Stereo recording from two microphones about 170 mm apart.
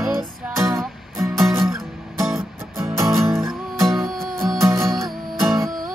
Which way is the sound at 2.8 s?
15° right (ahead or behind).